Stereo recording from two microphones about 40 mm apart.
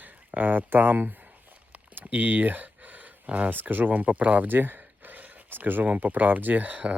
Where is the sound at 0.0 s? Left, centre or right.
Right.